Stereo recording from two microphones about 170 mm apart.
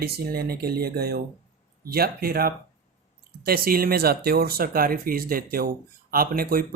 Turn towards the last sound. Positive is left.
turn(degrees=-60)  # may be behind; listen again after turning